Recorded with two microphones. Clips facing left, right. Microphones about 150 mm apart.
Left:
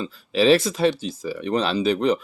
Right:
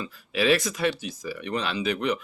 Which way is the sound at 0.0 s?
30° left (ahead or behind).